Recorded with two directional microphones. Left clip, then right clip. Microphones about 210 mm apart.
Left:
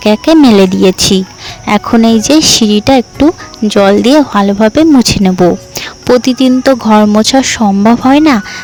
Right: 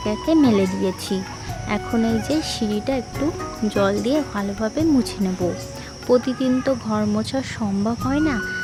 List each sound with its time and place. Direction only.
0.0 s speech: 45° left (ahead or behind)